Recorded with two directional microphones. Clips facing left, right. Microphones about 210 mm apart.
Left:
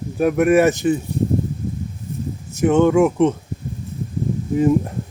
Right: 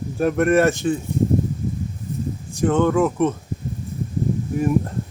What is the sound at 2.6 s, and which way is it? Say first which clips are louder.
Speech: left 4 dB; 10° left (ahead or behind).